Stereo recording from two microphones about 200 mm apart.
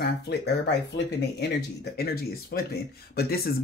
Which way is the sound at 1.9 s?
50° left (ahead or behind).